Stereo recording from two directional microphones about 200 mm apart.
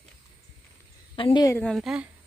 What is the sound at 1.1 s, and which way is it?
Speech, 25° left (ahead or behind).